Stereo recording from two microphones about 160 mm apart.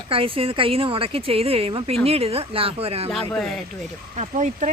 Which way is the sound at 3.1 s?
Centre (ahead or behind).